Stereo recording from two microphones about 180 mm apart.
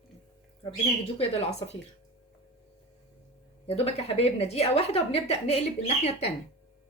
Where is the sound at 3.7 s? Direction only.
35° left (ahead or behind).